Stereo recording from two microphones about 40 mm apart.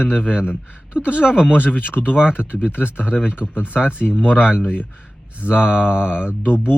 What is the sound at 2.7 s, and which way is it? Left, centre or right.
Speech, left.